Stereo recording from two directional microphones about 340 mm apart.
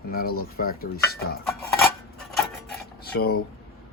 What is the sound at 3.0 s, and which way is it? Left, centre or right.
Speech, left.